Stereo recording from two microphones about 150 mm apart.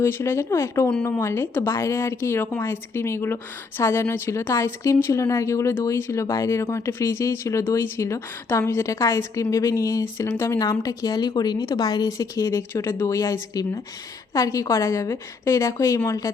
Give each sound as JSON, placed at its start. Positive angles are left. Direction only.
{"t": 0.0, "sound": "speech", "side_deg": 15}